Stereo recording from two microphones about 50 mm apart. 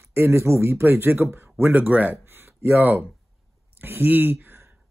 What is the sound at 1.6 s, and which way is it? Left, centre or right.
Speech, right.